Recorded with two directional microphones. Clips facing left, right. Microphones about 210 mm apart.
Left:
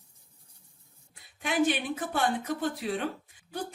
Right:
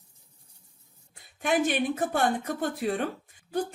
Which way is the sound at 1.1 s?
45° right (ahead or behind).